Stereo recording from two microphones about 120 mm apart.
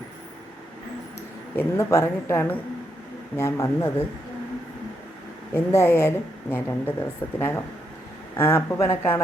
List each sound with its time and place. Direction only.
1.5 s speech: 25° left (ahead or behind)
5.5 s speech: 20° left (ahead or behind)